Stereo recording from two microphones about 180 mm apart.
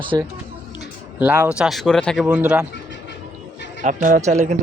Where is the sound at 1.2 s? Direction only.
10° right (ahead or behind).